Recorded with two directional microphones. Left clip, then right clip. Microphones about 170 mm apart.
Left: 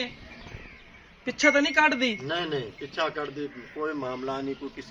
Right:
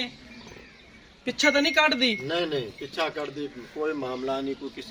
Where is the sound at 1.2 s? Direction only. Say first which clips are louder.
Even; 50° right (ahead or behind).